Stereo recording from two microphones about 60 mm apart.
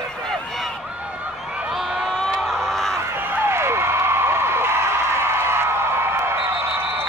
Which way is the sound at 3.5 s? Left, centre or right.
Right.